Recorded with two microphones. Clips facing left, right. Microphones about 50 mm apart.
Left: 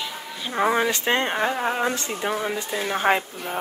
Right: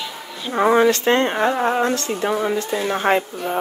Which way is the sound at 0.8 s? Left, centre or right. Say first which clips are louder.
Right 6 dB; centre.